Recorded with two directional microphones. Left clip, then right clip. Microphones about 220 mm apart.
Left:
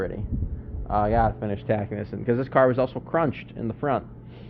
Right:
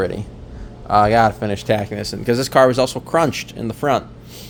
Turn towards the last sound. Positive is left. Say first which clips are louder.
# right 7 dB
turn(degrees=-25)  # may be behind; listen again after turning